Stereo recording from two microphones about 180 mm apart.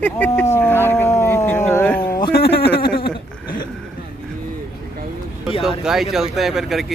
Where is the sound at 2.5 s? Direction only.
65° left (ahead or behind).